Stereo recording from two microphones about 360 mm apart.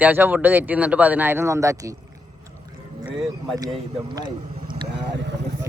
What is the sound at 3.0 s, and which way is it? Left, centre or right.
Speech, centre.